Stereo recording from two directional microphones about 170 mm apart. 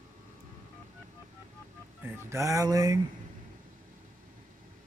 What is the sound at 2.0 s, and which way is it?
Speech, 15° right (ahead or behind).